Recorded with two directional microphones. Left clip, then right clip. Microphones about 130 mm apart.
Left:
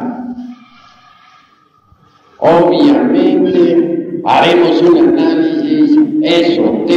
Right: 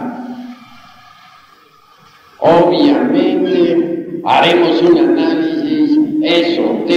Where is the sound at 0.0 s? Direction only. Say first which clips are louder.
Left 2 dB; 30° right (ahead or behind).